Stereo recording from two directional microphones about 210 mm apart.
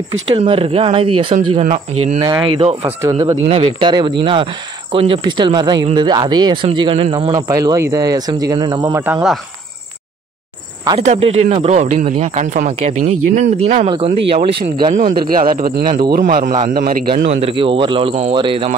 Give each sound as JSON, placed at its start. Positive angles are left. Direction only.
{"t": 0.3, "sound": "speech", "side_deg": -25}
{"t": 2.2, "sound": "speech", "side_deg": -20}
{"t": 3.4, "sound": "speech", "side_deg": -25}
{"t": 11.0, "sound": "speech", "side_deg": -30}
{"t": 13.8, "sound": "speech", "side_deg": -25}
{"t": 15.0, "sound": "a man's voice", "side_deg": -40}
{"t": 15.8, "sound": "speech", "side_deg": -20}
{"t": 16.1, "sound": "a man's voice", "side_deg": -45}
{"t": 17.3, "sound": "speech", "side_deg": -30}